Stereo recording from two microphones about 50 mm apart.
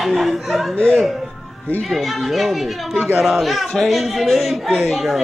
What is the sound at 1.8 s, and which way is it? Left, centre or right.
A man's voice, centre.